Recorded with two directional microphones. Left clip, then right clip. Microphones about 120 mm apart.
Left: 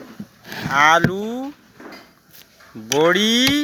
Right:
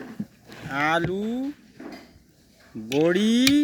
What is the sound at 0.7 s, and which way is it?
Speech, 25° right (ahead or behind).